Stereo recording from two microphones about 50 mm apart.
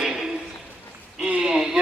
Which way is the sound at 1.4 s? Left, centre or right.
Centre.